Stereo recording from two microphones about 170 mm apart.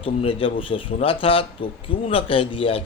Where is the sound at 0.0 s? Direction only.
30° left (ahead or behind).